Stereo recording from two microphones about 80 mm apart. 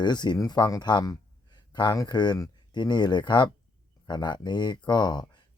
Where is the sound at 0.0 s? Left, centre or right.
Left.